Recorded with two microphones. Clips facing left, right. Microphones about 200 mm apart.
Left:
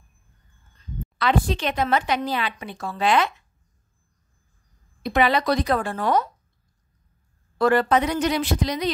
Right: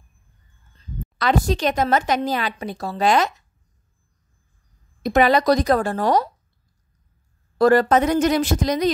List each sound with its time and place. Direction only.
0.7 s a woman's voice: 40° right (ahead or behind)
5.0 s speech: 45° right (ahead or behind)
7.5 s speech: 40° right (ahead or behind)